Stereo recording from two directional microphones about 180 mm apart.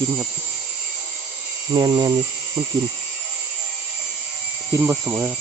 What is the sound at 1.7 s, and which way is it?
Speech, 25° right (ahead or behind).